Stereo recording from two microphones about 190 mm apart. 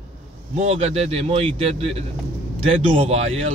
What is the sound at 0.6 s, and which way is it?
Speech, 35° right (ahead or behind).